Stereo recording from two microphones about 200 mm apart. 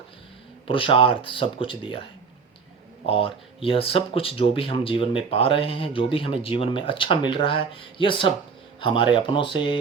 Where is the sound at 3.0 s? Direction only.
25° left (ahead or behind).